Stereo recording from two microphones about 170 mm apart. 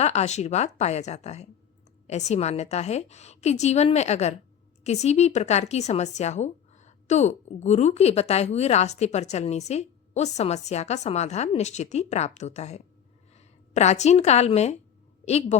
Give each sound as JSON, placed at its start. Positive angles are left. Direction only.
{"t": 0.0, "sound": "speech", "side_deg": 40}